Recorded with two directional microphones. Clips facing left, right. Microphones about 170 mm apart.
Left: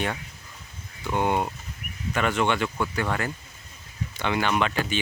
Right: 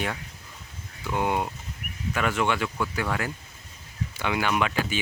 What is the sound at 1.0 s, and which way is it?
Speech, centre (ahead or behind).